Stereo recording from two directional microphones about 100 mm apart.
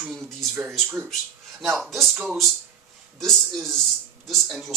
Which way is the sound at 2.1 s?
15° right (ahead or behind).